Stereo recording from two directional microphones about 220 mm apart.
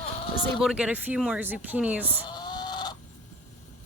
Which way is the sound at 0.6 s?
5° right (ahead or behind).